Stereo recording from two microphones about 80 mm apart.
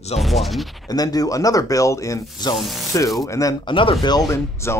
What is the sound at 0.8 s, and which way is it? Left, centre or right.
Speech, left.